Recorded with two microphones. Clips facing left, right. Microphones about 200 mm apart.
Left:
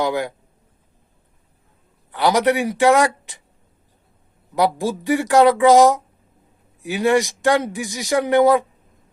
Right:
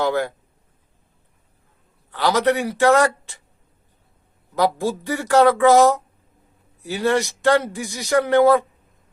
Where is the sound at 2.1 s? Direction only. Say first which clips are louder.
Left 2 dB; 15° left (ahead or behind).